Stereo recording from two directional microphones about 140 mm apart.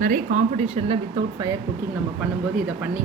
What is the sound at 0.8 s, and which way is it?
Speech, 35° right (ahead or behind).